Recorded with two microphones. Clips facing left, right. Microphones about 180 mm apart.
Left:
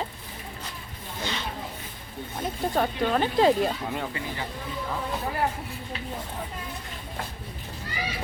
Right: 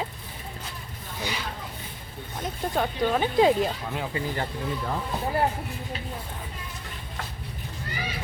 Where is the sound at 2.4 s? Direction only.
Centre (ahead or behind).